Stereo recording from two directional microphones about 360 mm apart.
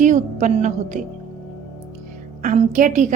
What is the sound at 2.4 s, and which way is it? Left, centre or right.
Speech, right.